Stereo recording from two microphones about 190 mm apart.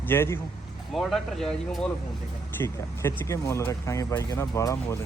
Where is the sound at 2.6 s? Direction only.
15° left (ahead or behind).